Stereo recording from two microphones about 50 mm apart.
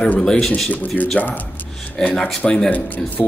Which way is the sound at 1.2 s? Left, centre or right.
Left.